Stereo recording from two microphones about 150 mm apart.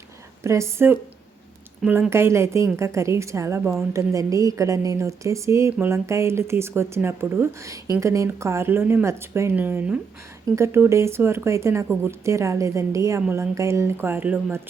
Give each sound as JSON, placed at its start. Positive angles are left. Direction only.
{"t": 0.4, "sound": "a woman's voice", "side_deg": -20}